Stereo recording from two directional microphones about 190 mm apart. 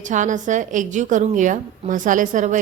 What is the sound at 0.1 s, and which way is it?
A woman's voice, 40° right (ahead or behind).